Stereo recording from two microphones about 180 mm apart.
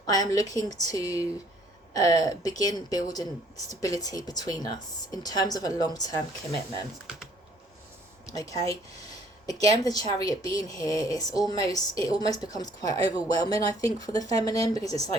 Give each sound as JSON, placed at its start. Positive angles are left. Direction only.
{"t": 0.0, "sound": "a woman's voice", "side_deg": 20}
{"t": 7.1, "sound": "typing", "side_deg": -5}
{"t": 8.3, "sound": "a woman's voice", "side_deg": 20}